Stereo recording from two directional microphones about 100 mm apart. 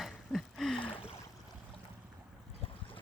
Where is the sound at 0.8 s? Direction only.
65° left (ahead or behind).